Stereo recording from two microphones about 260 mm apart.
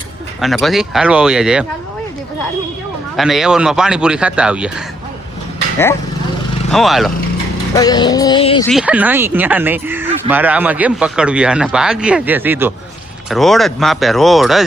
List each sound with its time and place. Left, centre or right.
0.4 s speech: centre
3.2 s speech: centre
6.7 s speech: centre
7.8 s music: centre
8.6 s speech: centre